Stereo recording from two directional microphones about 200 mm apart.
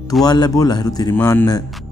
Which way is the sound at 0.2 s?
20° left (ahead or behind).